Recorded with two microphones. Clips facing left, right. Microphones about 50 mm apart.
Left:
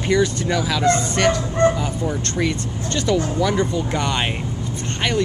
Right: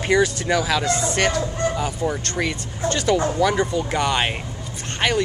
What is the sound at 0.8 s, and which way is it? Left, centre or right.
Speech, left.